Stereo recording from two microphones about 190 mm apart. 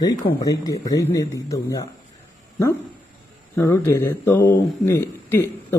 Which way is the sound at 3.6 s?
15° left (ahead or behind).